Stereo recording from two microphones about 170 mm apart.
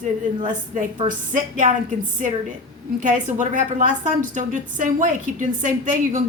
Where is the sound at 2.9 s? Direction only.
50° right (ahead or behind).